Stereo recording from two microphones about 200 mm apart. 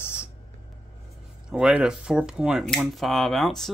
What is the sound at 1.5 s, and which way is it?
Speech, 5° right (ahead or behind).